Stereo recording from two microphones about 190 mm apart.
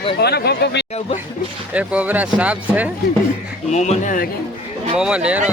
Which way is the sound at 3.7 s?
40° left (ahead or behind).